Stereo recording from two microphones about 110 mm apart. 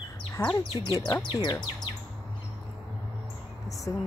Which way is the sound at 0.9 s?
35° left (ahead or behind).